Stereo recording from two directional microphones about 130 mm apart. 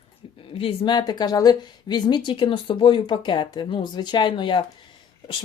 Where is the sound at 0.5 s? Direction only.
45° left (ahead or behind).